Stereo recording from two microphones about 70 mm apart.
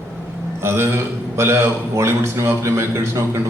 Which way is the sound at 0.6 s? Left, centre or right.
Right.